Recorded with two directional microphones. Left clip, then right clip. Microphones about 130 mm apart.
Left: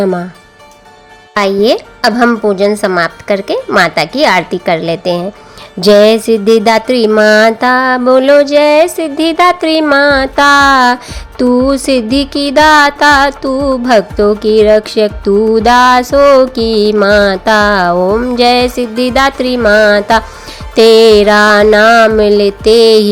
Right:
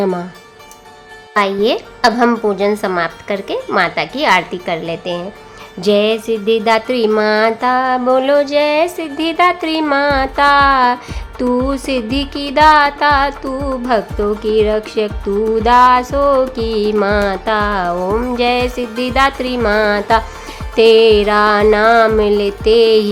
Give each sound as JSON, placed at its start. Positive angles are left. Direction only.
{"t": 0.0, "sound": "speech", "side_deg": 30}
{"t": 1.6, "sound": "a woman's voice", "side_deg": 35}
{"t": 2.4, "sound": "music", "side_deg": 30}
{"t": 5.8, "sound": "speech", "side_deg": 55}
{"t": 7.2, "sound": "music", "side_deg": 40}
{"t": 18.0, "sound": "speech", "side_deg": 25}
{"t": 18.3, "sound": "music", "side_deg": 40}